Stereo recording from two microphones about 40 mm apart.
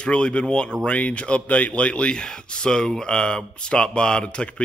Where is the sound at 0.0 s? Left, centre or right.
Left.